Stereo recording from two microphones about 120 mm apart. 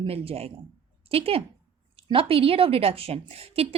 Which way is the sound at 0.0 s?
55° right (ahead or behind).